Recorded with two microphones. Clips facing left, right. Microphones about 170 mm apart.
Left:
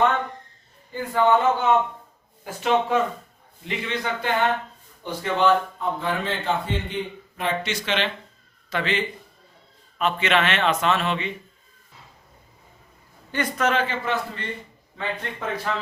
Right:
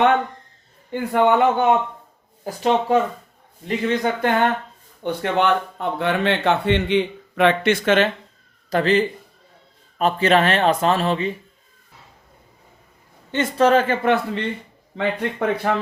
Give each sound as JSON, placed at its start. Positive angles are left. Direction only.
{"t": 0.9, "sound": "speech", "side_deg": -65}
{"t": 2.4, "sound": "a man's voice", "side_deg": -35}
{"t": 5.0, "sound": "a man's voice", "side_deg": -65}
{"t": 13.3, "sound": "a man's voice", "side_deg": -30}
{"t": 13.8, "sound": "speech", "side_deg": -55}